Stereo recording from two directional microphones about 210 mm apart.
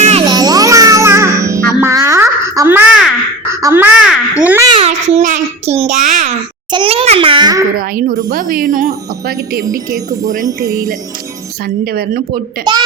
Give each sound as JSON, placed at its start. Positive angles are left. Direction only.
{"t": 0.0, "sound": "music", "side_deg": -30}
{"t": 3.5, "sound": "babbling", "side_deg": -15}
{"t": 4.7, "sound": "child singing", "side_deg": -30}
{"t": 6.7, "sound": "a child's voice", "side_deg": -25}
{"t": 7.8, "sound": "speech", "side_deg": -45}
{"t": 9.9, "sound": "chime", "side_deg": -40}
{"t": 11.9, "sound": "speech", "side_deg": -45}